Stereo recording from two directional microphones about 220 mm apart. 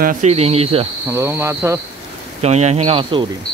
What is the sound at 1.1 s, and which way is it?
Speech, 10° right (ahead or behind).